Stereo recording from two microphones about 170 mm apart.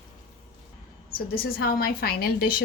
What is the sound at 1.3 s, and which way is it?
A woman's voice, 60° left (ahead or behind).